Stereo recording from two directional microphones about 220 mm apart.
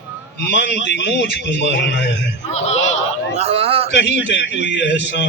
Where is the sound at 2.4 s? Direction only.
30° left (ahead or behind).